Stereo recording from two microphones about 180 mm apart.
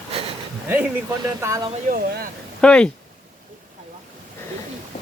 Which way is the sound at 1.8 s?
50° right (ahead or behind).